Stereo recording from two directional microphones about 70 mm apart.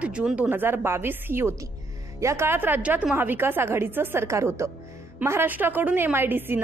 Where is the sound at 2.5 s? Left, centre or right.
Right.